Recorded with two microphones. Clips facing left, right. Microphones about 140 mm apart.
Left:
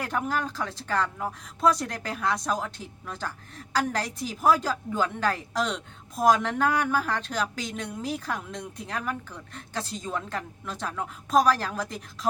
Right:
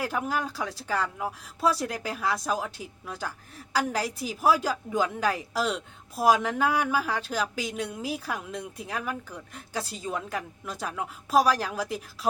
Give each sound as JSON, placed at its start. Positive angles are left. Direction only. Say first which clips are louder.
{"t": 0.0, "sound": "speech", "louder": "even", "side_deg": -5}